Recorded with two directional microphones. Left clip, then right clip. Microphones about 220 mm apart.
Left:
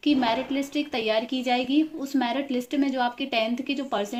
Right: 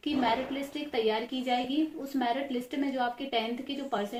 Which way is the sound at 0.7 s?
45° left (ahead or behind).